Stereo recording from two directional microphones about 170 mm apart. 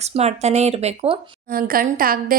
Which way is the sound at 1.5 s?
60° right (ahead or behind).